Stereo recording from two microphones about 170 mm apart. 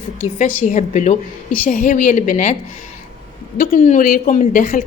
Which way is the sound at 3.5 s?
55° left (ahead or behind).